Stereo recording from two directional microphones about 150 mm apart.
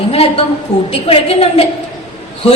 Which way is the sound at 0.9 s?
40° left (ahead or behind).